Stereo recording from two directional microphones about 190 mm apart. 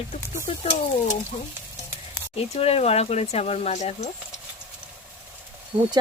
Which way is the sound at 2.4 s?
30° left (ahead or behind).